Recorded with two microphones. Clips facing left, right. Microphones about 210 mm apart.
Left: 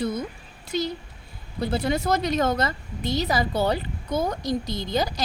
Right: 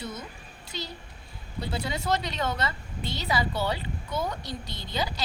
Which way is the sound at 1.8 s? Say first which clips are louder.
Left 5 dB; 45° left (ahead or behind).